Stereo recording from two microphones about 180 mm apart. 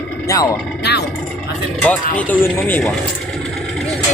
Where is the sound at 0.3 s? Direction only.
20° left (ahead or behind).